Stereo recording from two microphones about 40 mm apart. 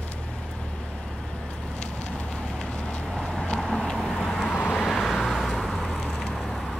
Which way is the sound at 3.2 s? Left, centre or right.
Centre.